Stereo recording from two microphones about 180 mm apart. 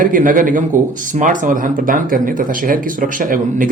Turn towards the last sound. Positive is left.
turn(degrees=-50)  # may be behind; listen again after turning